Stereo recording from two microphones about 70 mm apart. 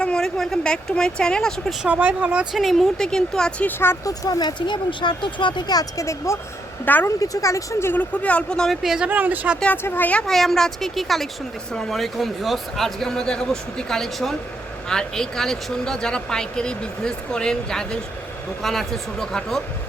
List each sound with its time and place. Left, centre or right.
0.0 s speech: centre
2.0 s speech: right
2.5 s speech: centre
3.7 s speech: left
4.0 s speech: left
6.0 s speech: left
6.8 s a woman's voice: left
7.2 s speech: left
7.9 s speech: centre
8.8 s speech: centre
9.0 s speech: right
9.7 s speech: left
10.2 s speech: centre